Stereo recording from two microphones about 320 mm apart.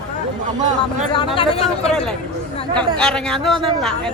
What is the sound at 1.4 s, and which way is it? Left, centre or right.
Speech, centre.